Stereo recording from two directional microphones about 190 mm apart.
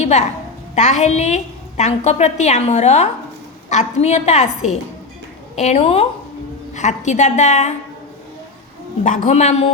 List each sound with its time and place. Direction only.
0.0 s a woman's voice: 35° left (ahead or behind)
9.0 s a woman's voice: 40° left (ahead or behind)